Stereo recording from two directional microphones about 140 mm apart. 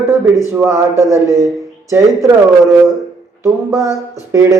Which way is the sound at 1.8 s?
20° right (ahead or behind).